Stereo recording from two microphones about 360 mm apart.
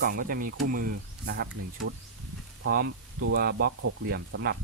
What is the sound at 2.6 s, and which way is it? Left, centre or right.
Speech, right.